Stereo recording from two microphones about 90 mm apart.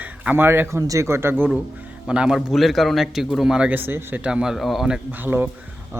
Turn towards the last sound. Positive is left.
turn(degrees=-20)  # may be behind; listen again after turning